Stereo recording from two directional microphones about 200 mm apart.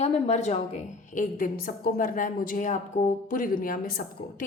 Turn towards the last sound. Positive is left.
turn(degrees=45)  # may be behind; listen again after turning